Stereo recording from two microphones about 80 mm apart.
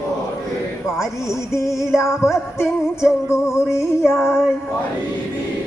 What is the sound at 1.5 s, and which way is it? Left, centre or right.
Music, left.